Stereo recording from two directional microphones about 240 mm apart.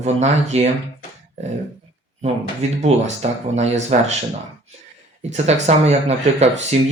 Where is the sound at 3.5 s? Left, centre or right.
Right.